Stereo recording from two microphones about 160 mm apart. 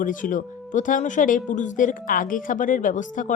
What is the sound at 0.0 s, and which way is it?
Speech, 55° left (ahead or behind).